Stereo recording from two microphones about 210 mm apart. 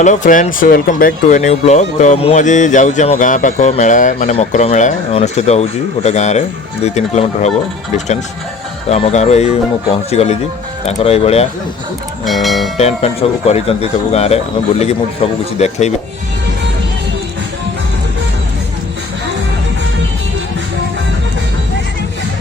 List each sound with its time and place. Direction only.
0.0 s speech: 35° left (ahead or behind)
12.2 s speech: centre (ahead or behind)
12.7 s speech: 30° left (ahead or behind)